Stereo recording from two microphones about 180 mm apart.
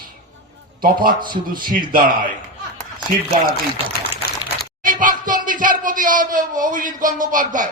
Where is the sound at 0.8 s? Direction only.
50° right (ahead or behind).